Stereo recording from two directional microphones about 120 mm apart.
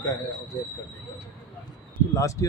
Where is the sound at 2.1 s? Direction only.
25° left (ahead or behind).